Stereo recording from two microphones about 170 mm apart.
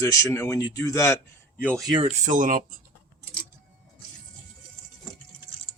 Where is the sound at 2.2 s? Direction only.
50° right (ahead or behind).